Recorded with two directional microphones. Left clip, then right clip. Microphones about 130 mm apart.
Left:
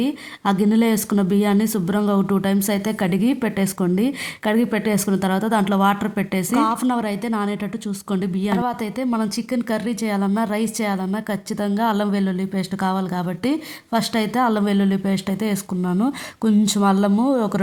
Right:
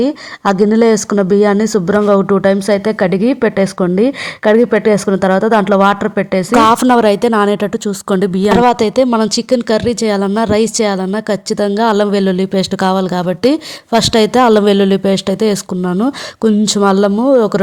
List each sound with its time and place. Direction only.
0.0 s speech: 35° right (ahead or behind)
6.5 s speech: 85° right
6.8 s a woman's voice: 65° right (ahead or behind)
9.1 s a woman's voice: 55° right (ahead or behind); by 17.6 s 35° right (ahead or behind)